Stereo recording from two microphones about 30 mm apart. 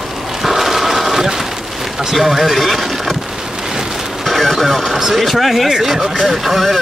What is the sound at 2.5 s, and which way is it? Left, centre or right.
Speech, centre.